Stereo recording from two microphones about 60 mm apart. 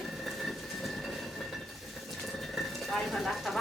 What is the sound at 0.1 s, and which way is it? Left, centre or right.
Train, centre.